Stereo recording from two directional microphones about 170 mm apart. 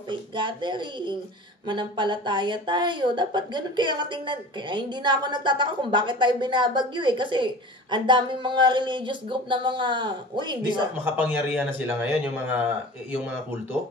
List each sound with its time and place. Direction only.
0.1 s speech: 30° right (ahead or behind)
11.1 s a man's voice: 10° right (ahead or behind)